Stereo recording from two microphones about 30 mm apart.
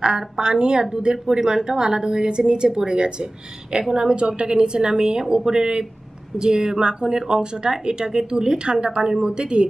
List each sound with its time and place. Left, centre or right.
0.4 s speech: right
1.1 s a woman's voice: centre; by 9.7 s right